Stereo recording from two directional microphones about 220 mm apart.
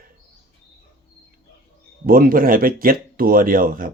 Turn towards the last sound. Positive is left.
turn(degrees=-40)  # may be behind; listen again after turning